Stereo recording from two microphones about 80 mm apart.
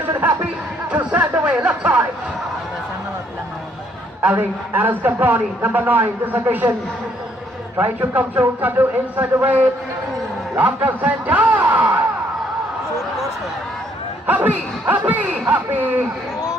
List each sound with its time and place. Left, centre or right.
0.0 s a sound: right
4.2 s a man's voice: right
7.8 s a man's voice: right
14.3 s a man's voice: right